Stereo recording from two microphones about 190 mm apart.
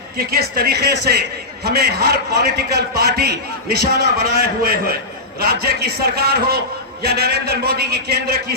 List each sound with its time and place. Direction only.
0.2 s a man's voice: 50° right (ahead or behind)